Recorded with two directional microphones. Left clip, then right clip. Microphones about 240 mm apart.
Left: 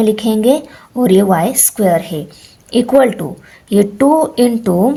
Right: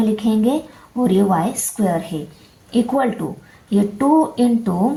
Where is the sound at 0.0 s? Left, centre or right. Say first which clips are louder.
Left 6 dB; left.